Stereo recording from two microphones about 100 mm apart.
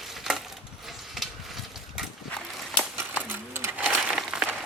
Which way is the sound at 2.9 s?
20° right (ahead or behind).